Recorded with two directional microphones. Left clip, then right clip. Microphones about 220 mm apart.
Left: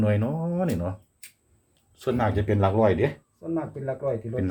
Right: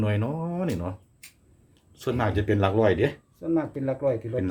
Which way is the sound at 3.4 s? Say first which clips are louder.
Right 6 dB; 40° right (ahead or behind).